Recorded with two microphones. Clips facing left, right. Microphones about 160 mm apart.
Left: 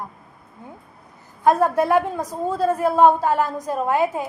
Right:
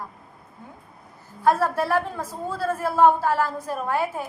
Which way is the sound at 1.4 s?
20° left (ahead or behind).